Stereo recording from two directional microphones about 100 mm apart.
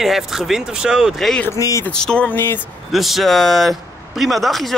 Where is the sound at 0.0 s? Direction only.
5° right (ahead or behind).